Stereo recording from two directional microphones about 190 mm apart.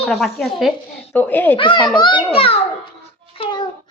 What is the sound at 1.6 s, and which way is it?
A child's voice, 25° left (ahead or behind).